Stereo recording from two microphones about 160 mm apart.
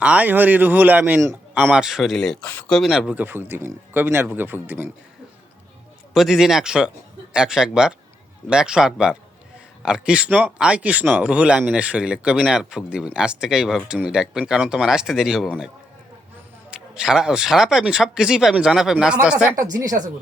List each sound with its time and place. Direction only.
0.0 s a man's voice: 10° right (ahead or behind)
6.1 s speech: centre (ahead or behind)
19.7 s speech: 25° right (ahead or behind)